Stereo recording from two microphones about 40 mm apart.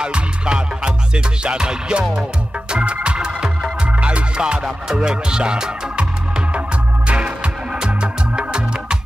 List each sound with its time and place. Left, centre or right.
0.0 s music: right
2.7 s organ: right
4.0 s music: right
4.9 s speech: right
7.1 s music: right